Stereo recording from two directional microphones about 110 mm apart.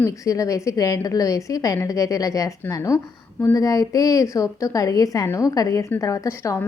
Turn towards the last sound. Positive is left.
turn(degrees=25)  # may be behind; listen again after turning